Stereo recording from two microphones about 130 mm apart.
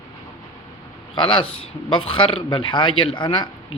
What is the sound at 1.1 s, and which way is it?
Speech, 40° left (ahead or behind).